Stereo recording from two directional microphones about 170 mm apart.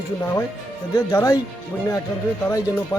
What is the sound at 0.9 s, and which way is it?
Speech, 20° left (ahead or behind).